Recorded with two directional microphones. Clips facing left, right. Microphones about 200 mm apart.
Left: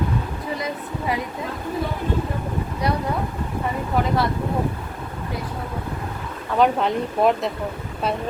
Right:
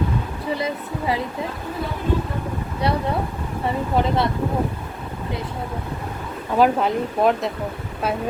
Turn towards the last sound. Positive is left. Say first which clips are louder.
# even
turn(degrees=0)  # may be behind; listen again after turning